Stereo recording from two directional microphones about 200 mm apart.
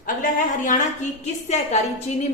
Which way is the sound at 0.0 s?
40° left (ahead or behind).